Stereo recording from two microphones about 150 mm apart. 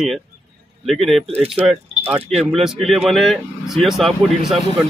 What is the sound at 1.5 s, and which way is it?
Speech, 10° right (ahead or behind).